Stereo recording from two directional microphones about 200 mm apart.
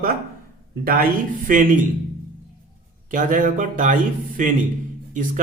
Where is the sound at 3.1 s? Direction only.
40° right (ahead or behind).